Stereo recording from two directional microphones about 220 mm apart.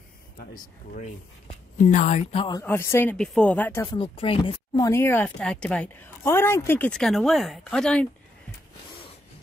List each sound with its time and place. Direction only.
0.6 s speech: 35° left (ahead or behind)
2.6 s speech: 10° left (ahead or behind)